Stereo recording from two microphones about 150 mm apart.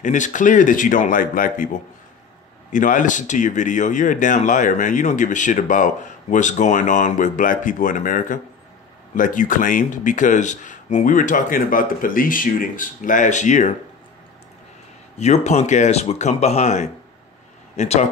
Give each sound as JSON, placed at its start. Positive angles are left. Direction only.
{"t": 0.0, "sound": "speech", "side_deg": 55}
{"t": 15.1, "sound": "speech", "side_deg": 45}